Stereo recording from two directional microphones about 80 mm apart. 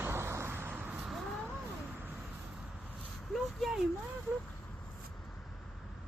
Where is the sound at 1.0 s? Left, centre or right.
Centre.